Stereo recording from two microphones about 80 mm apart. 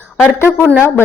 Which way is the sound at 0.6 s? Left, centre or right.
Centre.